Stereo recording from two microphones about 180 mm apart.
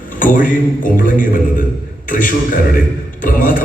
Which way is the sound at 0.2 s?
50° left (ahead or behind).